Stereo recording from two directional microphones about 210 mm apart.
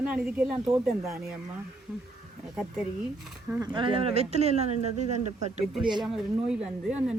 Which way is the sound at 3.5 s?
20° right (ahead or behind).